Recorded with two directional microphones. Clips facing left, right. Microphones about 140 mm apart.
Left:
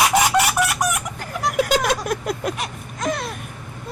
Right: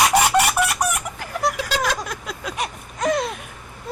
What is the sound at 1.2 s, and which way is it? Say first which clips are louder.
Vehicle: left 3 dB; 55° left (ahead or behind).